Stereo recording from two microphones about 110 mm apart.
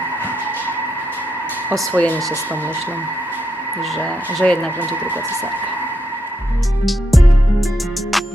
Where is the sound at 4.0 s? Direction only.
15° left (ahead or behind).